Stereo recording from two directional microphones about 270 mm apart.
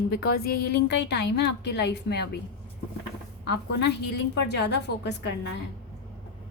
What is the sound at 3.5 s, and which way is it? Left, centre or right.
Speech, left.